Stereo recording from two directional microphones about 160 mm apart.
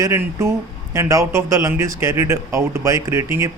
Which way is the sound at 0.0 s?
20° right (ahead or behind).